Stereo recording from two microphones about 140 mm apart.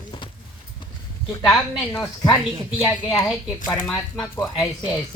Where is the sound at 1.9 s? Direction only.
25° left (ahead or behind).